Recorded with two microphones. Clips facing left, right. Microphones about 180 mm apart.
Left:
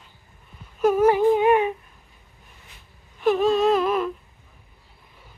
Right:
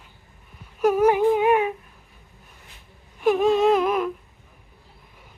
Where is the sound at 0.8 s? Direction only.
10° right (ahead or behind).